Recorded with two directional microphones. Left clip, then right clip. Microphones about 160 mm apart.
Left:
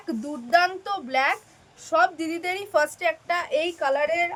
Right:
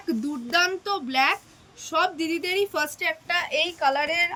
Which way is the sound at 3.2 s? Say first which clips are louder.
Even; 30° left (ahead or behind).